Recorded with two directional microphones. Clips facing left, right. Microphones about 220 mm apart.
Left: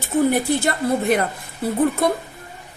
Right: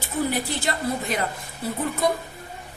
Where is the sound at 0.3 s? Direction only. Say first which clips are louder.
Left 7 dB; 55° left (ahead or behind).